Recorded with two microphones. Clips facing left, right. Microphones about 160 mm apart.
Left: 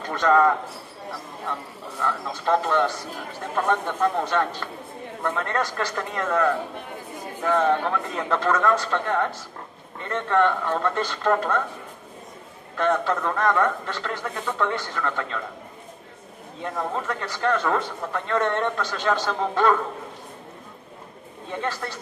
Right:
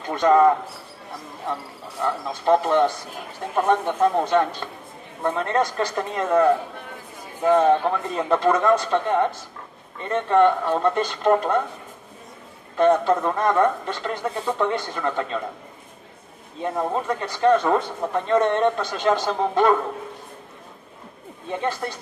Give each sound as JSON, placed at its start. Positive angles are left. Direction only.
{"t": 0.1, "sound": "a man's voice", "side_deg": -20}
{"t": 2.0, "sound": "a man's voice", "side_deg": -20}
{"t": 8.2, "sound": "a man's voice", "side_deg": -15}
{"t": 12.7, "sound": "a man's voice", "side_deg": -15}
{"t": 16.6, "sound": "a man's voice", "side_deg": -20}
{"t": 21.5, "sound": "a man's voice", "side_deg": -20}